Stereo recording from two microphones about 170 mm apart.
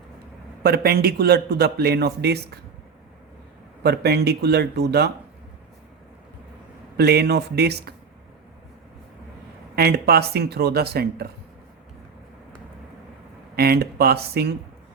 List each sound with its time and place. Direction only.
0.6 s a man's voice: 65° right (ahead or behind)
3.8 s a man's voice: 70° right (ahead or behind)
6.9 s a man's voice: 70° right (ahead or behind)
9.7 s a man's voice: 70° right (ahead or behind)
13.6 s a man's voice: 65° right (ahead or behind)